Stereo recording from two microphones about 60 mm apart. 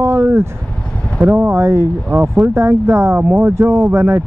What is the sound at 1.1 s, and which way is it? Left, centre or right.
Speech, right.